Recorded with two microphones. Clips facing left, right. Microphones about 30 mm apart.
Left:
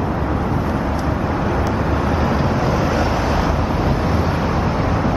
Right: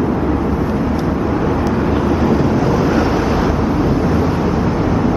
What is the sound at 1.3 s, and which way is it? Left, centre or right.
Vehicle, centre.